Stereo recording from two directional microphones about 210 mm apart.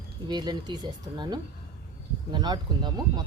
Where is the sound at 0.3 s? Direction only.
20° right (ahead or behind).